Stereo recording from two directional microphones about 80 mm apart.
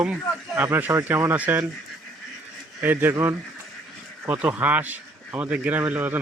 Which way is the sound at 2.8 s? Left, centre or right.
Right.